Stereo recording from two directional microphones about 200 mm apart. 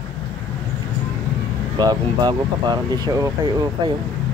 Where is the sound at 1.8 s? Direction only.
20° right (ahead or behind).